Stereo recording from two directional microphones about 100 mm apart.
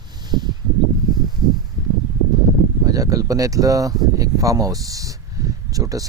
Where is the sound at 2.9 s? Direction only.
35° right (ahead or behind).